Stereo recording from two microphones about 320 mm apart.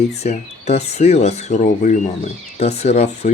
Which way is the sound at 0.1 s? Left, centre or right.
Centre.